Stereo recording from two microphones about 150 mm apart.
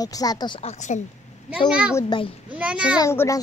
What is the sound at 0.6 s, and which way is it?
Speech, 50° left (ahead or behind).